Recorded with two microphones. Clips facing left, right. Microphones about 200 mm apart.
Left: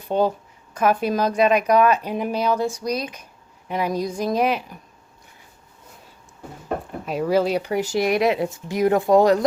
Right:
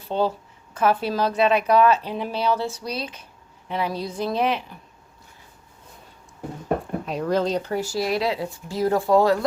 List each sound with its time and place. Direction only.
0.0 s speech: 15° left (ahead or behind)
7.0 s speech: 5° left (ahead or behind)